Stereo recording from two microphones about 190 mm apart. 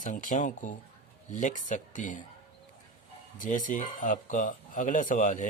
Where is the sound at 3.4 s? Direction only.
45° left (ahead or behind).